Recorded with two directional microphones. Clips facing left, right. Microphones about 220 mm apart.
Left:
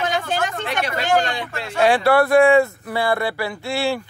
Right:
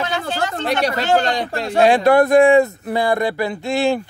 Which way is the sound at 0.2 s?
40° right (ahead or behind).